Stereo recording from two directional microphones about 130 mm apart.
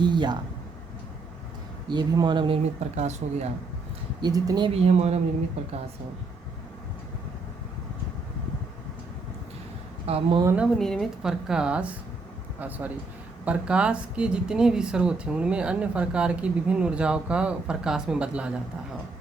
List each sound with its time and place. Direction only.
0.0 s speech: 35° right (ahead or behind)
1.9 s speech: 35° right (ahead or behind)
2.9 s speech: 60° right (ahead or behind)
4.2 s speech: 30° right (ahead or behind)
4.7 s speech: 50° right (ahead or behind)
10.1 s a woman's voice: 45° right (ahead or behind)
10.8 s a woman's voice: 5° left (ahead or behind)